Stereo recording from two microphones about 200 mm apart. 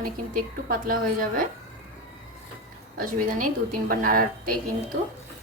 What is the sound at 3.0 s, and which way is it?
A woman's voice, 45° right (ahead or behind).